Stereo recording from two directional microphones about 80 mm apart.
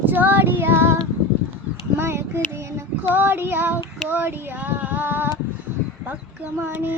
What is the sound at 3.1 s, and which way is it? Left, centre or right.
Female singing, right.